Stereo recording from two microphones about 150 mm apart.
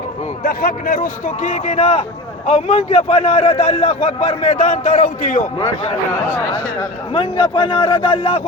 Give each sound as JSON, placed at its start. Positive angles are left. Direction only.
{"t": 0.4, "sound": "a man's voice", "side_deg": 70}
{"t": 5.5, "sound": "speech", "side_deg": 30}
{"t": 7.1, "sound": "a man's voice", "side_deg": 35}